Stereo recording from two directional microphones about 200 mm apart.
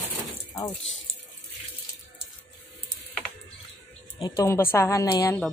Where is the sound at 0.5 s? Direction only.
15° left (ahead or behind).